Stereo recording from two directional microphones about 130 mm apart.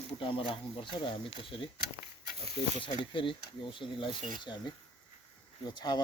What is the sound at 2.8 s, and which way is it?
Speech, 40° left (ahead or behind).